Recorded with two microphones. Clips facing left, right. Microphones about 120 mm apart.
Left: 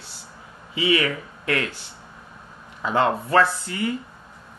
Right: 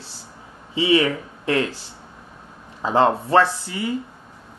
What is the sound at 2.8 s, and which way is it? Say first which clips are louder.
Speech: right 3 dB; 30° right (ahead or behind).